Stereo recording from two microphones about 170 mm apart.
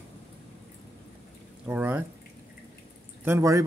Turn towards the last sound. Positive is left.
turn(degrees=-15)  # may be behind; listen again after turning